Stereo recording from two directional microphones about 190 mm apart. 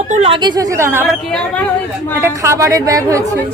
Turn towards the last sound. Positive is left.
turn(degrees=-15)  # may be behind; listen again after turning